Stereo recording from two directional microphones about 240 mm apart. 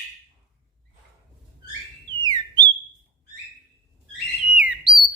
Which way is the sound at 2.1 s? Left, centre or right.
Centre.